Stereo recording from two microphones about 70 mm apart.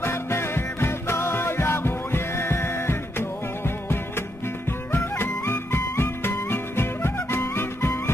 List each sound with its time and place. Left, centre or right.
0.0 s music: left